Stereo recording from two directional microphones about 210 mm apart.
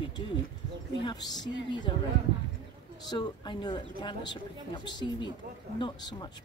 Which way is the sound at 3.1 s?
20° left (ahead or behind).